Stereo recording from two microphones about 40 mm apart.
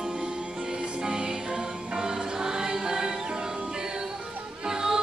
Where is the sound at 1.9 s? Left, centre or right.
Centre.